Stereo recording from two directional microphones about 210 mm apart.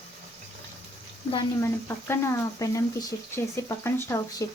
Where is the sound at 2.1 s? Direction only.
10° left (ahead or behind).